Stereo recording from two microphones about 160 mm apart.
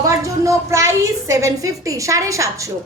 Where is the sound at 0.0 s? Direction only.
20° right (ahead or behind).